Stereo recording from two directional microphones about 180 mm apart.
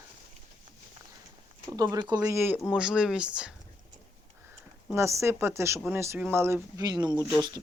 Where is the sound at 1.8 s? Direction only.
25° right (ahead or behind); by 3.6 s 5° right (ahead or behind).